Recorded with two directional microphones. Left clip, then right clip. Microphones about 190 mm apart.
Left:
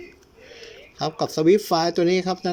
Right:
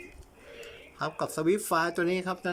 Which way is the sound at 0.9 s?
15° left (ahead or behind).